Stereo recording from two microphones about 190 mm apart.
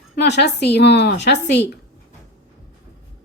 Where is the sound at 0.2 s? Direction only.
65° left (ahead or behind).